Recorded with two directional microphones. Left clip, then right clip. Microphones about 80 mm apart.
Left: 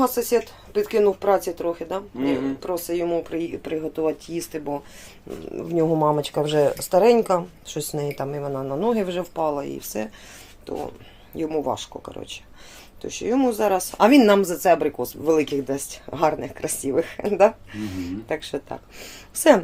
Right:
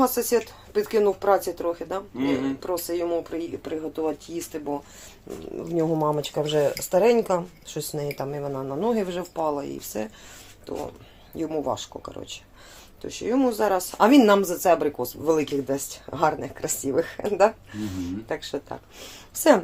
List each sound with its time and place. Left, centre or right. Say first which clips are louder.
0.0 s speech: left 1 dB; centre; by 5.8 s left
5.8 s speech: left 4 dB; left
8.1 s speech: left 2 dB; left
11.3 s speech: left 2 dB; left